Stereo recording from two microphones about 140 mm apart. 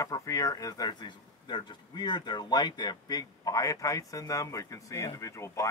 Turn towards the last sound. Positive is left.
turn(degrees=20)  # may be behind; listen again after turning